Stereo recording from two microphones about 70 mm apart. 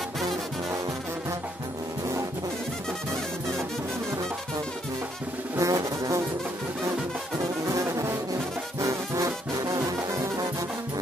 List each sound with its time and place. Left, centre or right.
5.6 s music: right
7.6 s music: right
8.7 s brass instrument: right
9.8 s music: right